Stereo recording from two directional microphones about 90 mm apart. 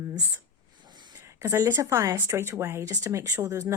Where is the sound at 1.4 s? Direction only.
30° right (ahead or behind).